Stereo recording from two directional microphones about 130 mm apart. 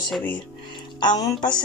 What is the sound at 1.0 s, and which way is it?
Speech, 30° left (ahead or behind).